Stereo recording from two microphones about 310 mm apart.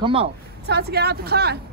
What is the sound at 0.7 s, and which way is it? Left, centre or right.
Speech, right.